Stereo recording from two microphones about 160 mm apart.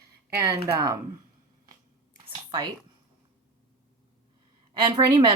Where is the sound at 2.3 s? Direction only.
30° right (ahead or behind).